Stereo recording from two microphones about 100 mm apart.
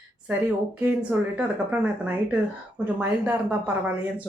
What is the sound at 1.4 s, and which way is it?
Speech, 15° right (ahead or behind).